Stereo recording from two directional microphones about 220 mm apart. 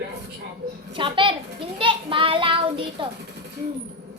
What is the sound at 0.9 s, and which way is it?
A child's voice, 20° right (ahead or behind).